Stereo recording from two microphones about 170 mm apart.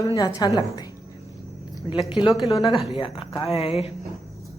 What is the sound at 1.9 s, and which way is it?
A woman's voice, 30° left (ahead or behind).